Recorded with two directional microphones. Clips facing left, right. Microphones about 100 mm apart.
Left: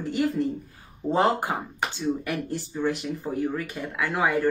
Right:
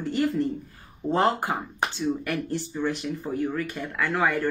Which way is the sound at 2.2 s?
10° left (ahead or behind).